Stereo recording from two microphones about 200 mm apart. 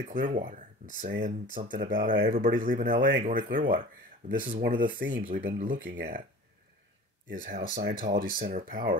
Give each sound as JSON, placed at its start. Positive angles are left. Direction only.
{"t": 0.0, "sound": "speech", "side_deg": -45}
{"t": 5.8, "sound": "speech", "side_deg": -60}
{"t": 7.4, "sound": "speech", "side_deg": -45}